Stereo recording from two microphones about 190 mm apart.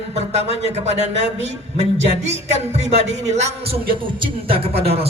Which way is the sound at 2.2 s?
35° right (ahead or behind).